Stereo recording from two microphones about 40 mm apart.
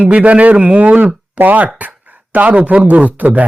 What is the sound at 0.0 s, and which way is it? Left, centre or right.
Speech, right.